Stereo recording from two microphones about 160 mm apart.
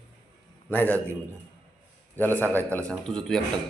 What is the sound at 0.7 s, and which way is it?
Speech, 10° left (ahead or behind).